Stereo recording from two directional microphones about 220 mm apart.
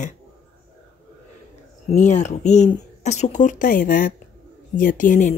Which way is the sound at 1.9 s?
30° left (ahead or behind).